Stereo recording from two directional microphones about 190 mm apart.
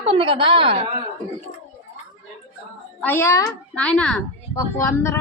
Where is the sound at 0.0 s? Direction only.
30° right (ahead or behind).